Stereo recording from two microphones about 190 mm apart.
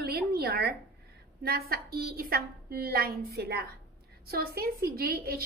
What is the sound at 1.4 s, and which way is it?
A woman's voice, 55° right (ahead or behind).